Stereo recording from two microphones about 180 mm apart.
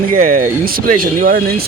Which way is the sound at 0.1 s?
50° right (ahead or behind).